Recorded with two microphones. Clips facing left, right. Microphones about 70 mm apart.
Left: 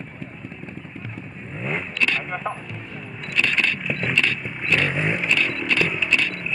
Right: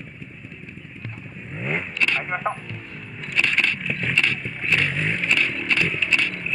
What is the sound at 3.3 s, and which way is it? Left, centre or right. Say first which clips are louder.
Vehicle: even; centre.